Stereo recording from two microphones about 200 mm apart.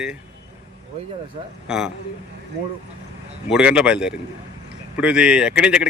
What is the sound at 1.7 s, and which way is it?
Speech, centre (ahead or behind).